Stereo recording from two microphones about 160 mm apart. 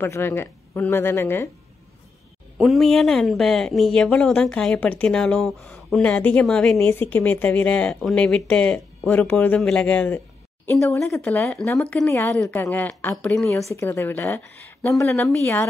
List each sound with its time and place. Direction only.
0.0 s speech: 15° left (ahead or behind)
2.6 s speech: centre (ahead or behind)